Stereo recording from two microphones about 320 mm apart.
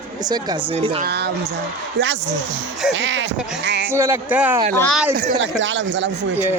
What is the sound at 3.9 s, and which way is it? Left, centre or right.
Speech, centre.